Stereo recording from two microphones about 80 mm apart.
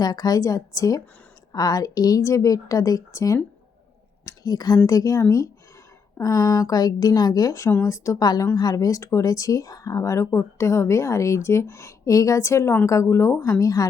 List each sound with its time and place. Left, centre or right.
0.0 s a woman's voice: left
4.3 s speech: left
4.9 s a woman's voice: left
7.7 s speech: left
8.2 s speech: left
13.4 s a woman's voice: left